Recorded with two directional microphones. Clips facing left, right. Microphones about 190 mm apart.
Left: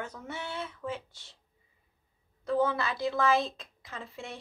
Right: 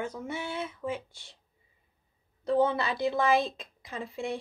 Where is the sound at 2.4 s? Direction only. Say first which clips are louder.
Right 2 dB; 20° right (ahead or behind).